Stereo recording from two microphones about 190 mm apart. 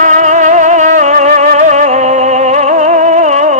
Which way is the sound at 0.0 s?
40° right (ahead or behind).